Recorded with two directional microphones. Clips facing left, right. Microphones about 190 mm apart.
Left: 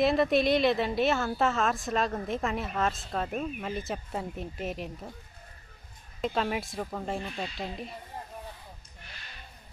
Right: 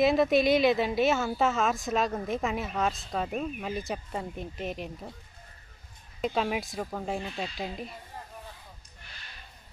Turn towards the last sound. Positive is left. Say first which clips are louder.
# right 1 dB
turn(degrees=-5)  # may be behind; listen again after turning